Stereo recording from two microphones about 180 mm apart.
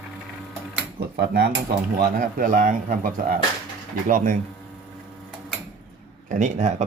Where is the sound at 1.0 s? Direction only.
60° right (ahead or behind).